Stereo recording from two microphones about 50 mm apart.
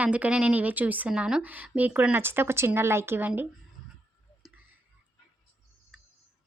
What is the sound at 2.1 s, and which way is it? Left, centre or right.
Speech, right.